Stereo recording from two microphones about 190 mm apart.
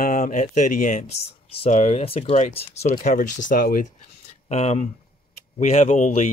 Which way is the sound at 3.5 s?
50° left (ahead or behind).